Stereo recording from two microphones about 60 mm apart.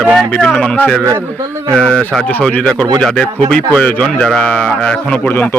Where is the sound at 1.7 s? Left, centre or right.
Centre.